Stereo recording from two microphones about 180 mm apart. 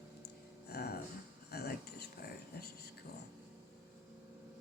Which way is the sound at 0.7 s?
65° left (ahead or behind).